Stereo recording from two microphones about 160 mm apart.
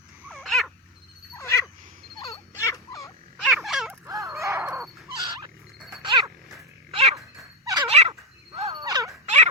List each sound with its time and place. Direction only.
0.3 s dog: centre (ahead or behind)
1.4 s wild animals: 20° left (ahead or behind)
2.6 s turkey: 20° left (ahead or behind)
3.4 s a sound: centre (ahead or behind)
4.0 s dog: 20° right (ahead or behind)
6.0 s music: 30° right (ahead or behind)
6.9 s dog: 40° right (ahead or behind)
7.6 s dog: 25° right (ahead or behind)
7.9 s dog: 40° right (ahead or behind)
8.5 s a sound: 40° right (ahead or behind)
8.8 s a sound: 20° right (ahead or behind)
9.2 s a sound: 45° right (ahead or behind)